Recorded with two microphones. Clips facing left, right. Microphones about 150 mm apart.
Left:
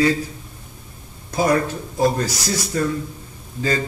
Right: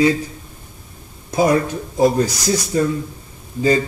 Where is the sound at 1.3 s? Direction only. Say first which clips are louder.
Right 3 dB; 20° right (ahead or behind).